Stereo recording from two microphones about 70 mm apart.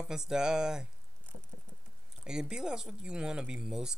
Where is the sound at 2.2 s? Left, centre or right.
Centre.